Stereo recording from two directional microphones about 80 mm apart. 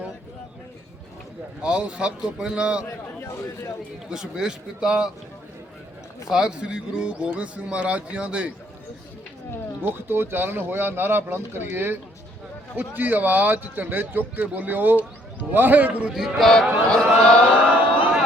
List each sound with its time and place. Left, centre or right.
1.6 s a man's voice: centre
4.1 s a man's voice: centre
6.2 s a man's voice: centre
9.8 s speech: right
16.1 s a sound: centre